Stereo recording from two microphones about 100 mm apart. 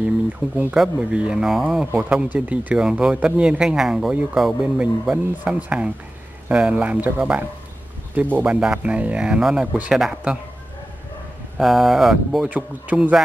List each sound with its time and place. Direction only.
0.7 s speech: 10° right (ahead or behind)
1.9 s speech: 15° right (ahead or behind)
5.1 s speech: 15° right (ahead or behind)
11.5 s speech: centre (ahead or behind)
12.4 s speech: 15° right (ahead or behind)